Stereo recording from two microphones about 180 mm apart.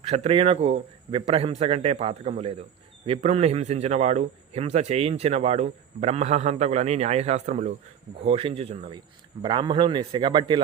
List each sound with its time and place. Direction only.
0.0 s a man's voice: 35° right (ahead or behind)